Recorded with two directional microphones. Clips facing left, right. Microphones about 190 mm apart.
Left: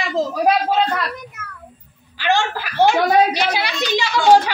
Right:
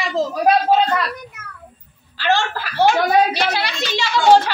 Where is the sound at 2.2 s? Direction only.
15° left (ahead or behind).